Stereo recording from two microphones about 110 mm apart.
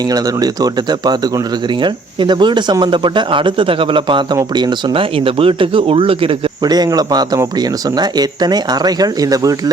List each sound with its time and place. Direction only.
0.1 s speech: 35° right (ahead or behind); by 6.3 s 55° right (ahead or behind)
6.6 s speech: 40° right (ahead or behind)